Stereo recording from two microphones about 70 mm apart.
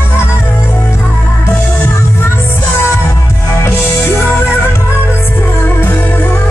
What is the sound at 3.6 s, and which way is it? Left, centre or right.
Music, left.